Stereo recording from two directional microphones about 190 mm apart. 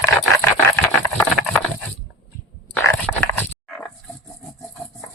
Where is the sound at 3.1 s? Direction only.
5° left (ahead or behind).